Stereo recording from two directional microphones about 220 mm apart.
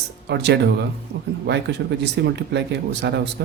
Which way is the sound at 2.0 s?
50° right (ahead or behind).